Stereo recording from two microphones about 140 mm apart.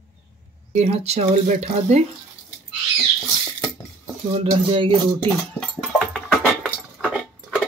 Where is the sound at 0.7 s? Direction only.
55° right (ahead or behind).